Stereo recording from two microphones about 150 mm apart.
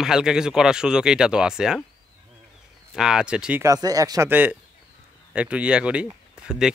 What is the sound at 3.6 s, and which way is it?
Speech, 25° right (ahead or behind).